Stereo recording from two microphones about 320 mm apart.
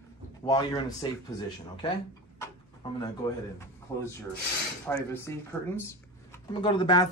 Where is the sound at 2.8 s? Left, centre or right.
Centre.